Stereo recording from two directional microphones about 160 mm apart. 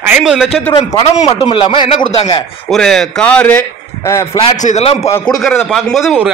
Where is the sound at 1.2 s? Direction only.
35° left (ahead or behind).